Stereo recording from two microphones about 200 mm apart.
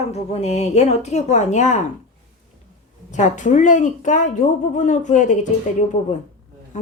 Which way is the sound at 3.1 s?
35° left (ahead or behind).